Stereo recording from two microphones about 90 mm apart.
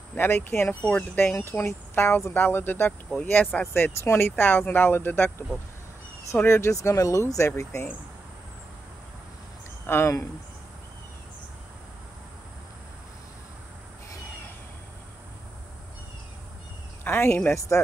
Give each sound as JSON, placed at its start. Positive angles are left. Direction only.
{"t": 0.1, "sound": "speech", "side_deg": 20}
{"t": 0.8, "sound": "speech", "side_deg": 10}
{"t": 1.5, "sound": "speech", "side_deg": 30}
{"t": 6.4, "sound": "speech", "side_deg": 30}
{"t": 9.8, "sound": "speech", "side_deg": 25}
{"t": 17.0, "sound": "speech", "side_deg": 25}